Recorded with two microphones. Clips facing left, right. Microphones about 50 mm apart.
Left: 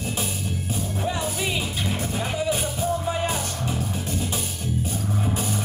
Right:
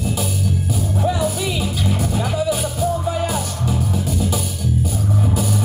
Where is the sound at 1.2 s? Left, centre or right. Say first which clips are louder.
Right 5 dB; left.